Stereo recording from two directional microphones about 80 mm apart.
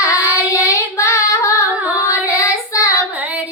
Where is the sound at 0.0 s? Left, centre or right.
Left.